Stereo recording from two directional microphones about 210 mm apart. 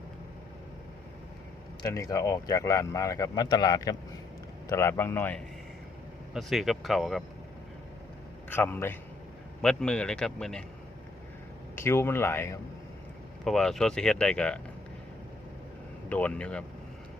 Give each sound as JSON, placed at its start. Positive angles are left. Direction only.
{"t": 1.8, "sound": "speech", "side_deg": 15}
{"t": 6.3, "sound": "speech", "side_deg": 0}
{"t": 8.4, "sound": "speech", "side_deg": 10}
{"t": 11.8, "sound": "speech", "side_deg": 10}
{"t": 16.0, "sound": "speech", "side_deg": 5}